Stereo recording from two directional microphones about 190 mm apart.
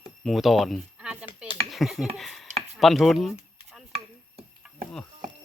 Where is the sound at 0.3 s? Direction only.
Centre (ahead or behind).